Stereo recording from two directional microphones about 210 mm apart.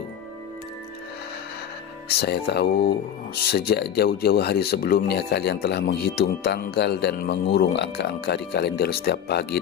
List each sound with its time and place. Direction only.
2.0 s speech: 50° left (ahead or behind)